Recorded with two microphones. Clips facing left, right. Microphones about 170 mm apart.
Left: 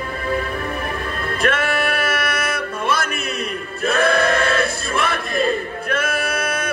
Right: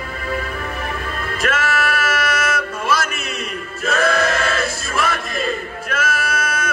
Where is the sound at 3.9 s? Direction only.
55° left (ahead or behind).